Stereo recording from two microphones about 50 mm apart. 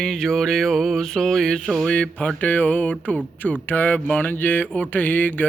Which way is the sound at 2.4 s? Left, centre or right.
Left.